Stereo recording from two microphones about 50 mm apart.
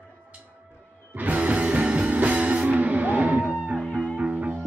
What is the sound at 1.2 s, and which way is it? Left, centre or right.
Music, right.